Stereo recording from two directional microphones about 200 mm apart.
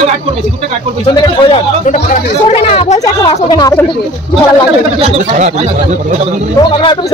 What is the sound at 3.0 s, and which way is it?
Speech, 20° left (ahead or behind).